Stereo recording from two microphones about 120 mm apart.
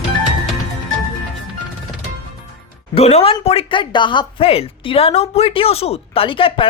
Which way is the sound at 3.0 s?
55° left (ahead or behind).